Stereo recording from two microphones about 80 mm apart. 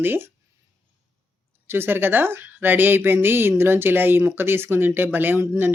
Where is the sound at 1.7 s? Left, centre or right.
Right.